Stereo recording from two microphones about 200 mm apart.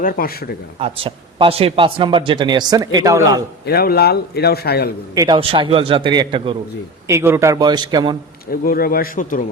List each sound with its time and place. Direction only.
0.0 s speech: 45° left (ahead or behind)
0.8 s speech: 25° right (ahead or behind)
3.7 s speech: 50° left (ahead or behind)
5.1 s speech: 20° right (ahead or behind)
7.1 s speech: 15° right (ahead or behind)
8.4 s speech: 45° left (ahead or behind)